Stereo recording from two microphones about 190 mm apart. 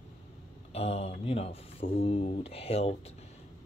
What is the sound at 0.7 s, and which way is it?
A man's voice, 35° left (ahead or behind).